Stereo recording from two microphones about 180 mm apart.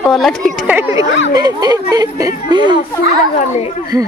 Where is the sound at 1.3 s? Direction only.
20° right (ahead or behind).